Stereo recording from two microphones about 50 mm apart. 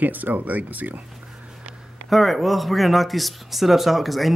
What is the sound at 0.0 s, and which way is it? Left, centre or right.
Speech, right.